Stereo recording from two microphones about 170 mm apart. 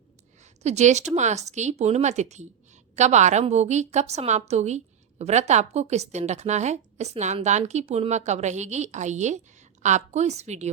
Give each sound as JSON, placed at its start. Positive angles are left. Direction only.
{"t": 0.6, "sound": "a woman's voice", "side_deg": -40}